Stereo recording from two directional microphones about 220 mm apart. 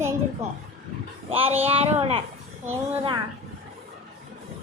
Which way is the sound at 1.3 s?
25° right (ahead or behind).